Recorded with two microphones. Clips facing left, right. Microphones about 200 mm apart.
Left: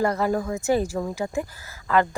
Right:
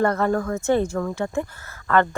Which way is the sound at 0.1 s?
15° left (ahead or behind).